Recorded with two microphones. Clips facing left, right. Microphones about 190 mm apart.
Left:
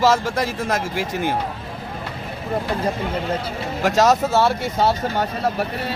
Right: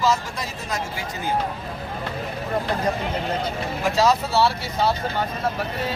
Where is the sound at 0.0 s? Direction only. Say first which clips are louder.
Left 5 dB; 90° left.